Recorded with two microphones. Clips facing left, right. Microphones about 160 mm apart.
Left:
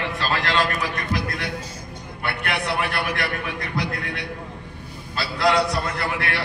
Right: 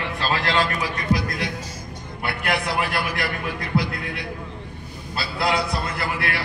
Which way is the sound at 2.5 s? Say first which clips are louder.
Right 2 dB; 70° left (ahead or behind).